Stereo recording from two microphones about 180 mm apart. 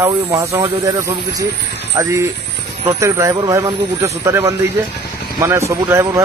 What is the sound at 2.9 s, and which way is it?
Speech, 15° right (ahead or behind).